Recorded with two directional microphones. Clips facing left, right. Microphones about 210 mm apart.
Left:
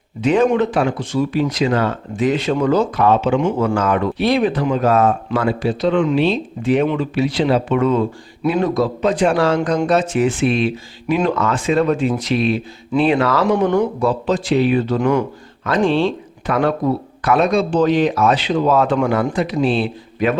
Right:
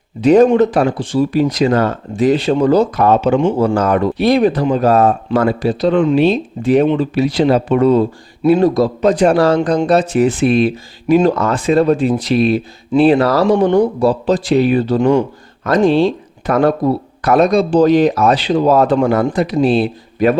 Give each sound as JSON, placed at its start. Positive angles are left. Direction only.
{"t": 0.2, "sound": "speech", "side_deg": -40}
{"t": 15.6, "sound": "speech", "side_deg": -40}